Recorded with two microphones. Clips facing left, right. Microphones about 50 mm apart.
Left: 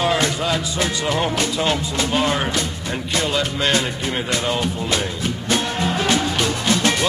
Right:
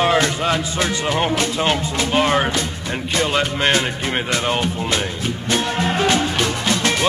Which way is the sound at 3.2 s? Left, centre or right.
Right.